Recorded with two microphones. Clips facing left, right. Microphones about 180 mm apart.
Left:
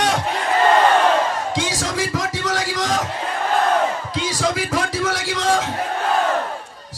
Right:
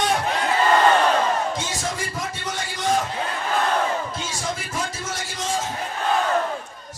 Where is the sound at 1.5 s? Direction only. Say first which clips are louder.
Left 4 dB; 80° left.